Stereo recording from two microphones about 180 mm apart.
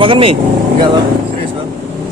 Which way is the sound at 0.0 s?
30° right (ahead or behind).